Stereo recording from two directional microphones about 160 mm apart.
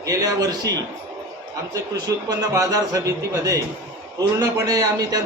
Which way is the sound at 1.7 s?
20° right (ahead or behind).